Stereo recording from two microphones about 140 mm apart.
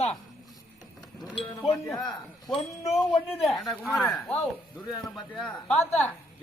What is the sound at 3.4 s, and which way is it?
A man's voice, centre (ahead or behind).